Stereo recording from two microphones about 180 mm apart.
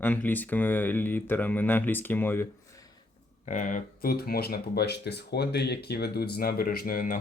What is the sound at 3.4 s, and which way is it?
Speech, 45° left (ahead or behind).